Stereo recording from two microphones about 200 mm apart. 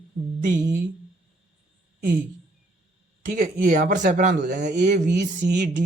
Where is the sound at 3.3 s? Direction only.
45° right (ahead or behind).